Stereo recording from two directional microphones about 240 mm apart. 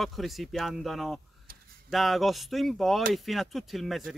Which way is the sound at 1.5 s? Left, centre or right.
Right.